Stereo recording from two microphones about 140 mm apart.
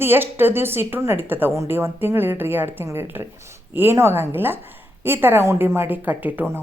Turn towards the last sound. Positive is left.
turn(degrees=-10)  # may be behind; listen again after turning